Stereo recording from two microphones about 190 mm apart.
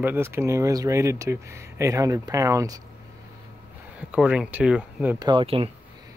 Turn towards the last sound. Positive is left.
turn(degrees=-30)  # may be behind; listen again after turning